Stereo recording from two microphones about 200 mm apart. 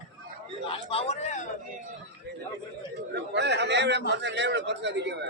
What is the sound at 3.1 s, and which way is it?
Chatter, 60° right (ahead or behind).